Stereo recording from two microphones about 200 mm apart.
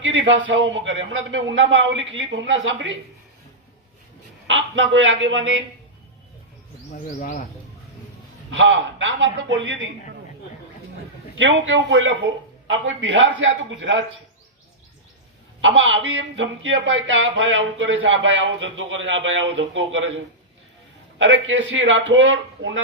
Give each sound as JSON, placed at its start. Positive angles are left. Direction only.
{"t": 0.0, "sound": "speech", "side_deg": -65}
{"t": 4.4, "sound": "speech", "side_deg": -70}
{"t": 7.2, "sound": "speech", "side_deg": 40}
{"t": 8.4, "sound": "speech", "side_deg": -65}
{"t": 11.3, "sound": "speech", "side_deg": -70}
{"t": 15.6, "sound": "speech", "side_deg": -70}